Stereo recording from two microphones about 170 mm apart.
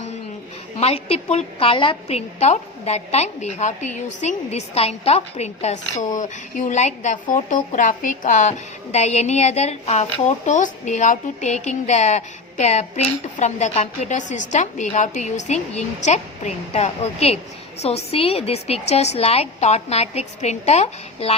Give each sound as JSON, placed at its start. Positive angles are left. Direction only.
{"t": 0.8, "sound": "a woman's voice", "side_deg": 35}